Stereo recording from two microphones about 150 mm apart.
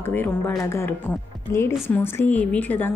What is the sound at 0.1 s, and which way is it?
A woman's voice, 15° left (ahead or behind).